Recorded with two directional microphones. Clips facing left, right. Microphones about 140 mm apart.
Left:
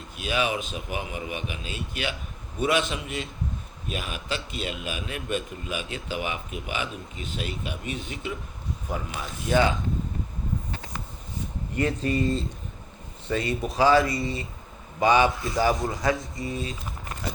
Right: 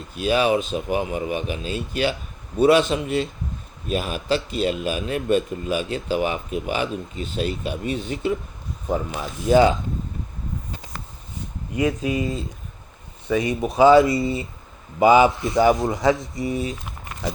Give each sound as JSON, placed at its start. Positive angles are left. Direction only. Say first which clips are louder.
{"t": 0.2, "sound": "a man's voice", "louder": "right 8 dB", "side_deg": -35}
{"t": 9.4, "sound": "a man's voice", "louder": "right 7 dB", "side_deg": -25}
{"t": 11.8, "sound": "a man's voice", "louder": "right 3 dB", "side_deg": -10}